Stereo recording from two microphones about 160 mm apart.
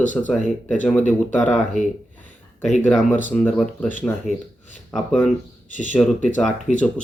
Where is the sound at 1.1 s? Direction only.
5° left (ahead or behind).